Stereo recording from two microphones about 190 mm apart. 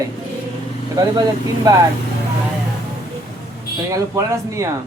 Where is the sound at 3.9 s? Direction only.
15° right (ahead or behind).